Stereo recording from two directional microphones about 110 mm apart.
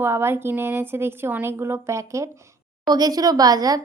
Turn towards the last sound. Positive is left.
turn(degrees=-35)  # may be behind; listen again after turning